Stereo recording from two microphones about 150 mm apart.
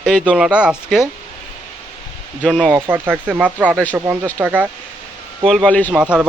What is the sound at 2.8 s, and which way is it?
Speech, 15° right (ahead or behind).